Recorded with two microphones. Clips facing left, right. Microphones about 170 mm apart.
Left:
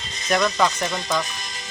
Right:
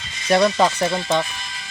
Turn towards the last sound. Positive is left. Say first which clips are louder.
# right 5 dB
turn(degrees=-30)  # may be behind; listen again after turning